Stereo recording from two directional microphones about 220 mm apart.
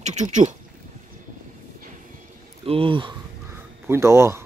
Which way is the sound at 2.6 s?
25° right (ahead or behind).